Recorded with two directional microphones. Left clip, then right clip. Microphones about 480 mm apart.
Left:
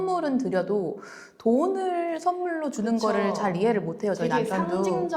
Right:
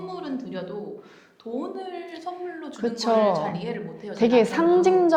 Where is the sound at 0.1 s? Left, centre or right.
Left.